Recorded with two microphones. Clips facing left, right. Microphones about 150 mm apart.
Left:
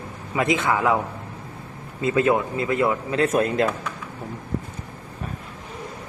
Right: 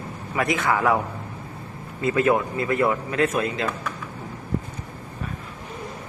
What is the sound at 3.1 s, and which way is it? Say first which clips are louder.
Speech: left 3 dB; 40° left (ahead or behind).